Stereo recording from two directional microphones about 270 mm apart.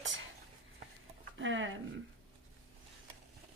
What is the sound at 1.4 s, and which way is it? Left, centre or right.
Speech, right.